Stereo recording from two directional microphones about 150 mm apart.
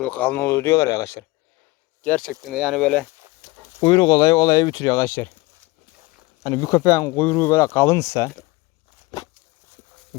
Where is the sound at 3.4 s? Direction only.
30° left (ahead or behind); by 5.3 s 15° left (ahead or behind).